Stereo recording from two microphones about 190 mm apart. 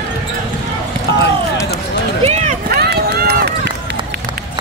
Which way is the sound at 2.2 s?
35° right (ahead or behind).